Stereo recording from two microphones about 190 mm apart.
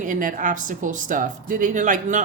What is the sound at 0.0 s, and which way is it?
A woman's voice, 45° right (ahead or behind).